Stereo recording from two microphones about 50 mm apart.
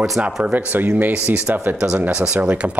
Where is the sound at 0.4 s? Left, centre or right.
Right.